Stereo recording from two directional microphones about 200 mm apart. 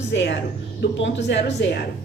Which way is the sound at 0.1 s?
60° left (ahead or behind).